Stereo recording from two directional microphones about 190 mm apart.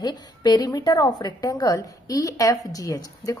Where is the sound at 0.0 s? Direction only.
20° left (ahead or behind).